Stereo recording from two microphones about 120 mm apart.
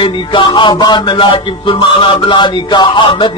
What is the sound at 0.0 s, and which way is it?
Speech, 45° left (ahead or behind).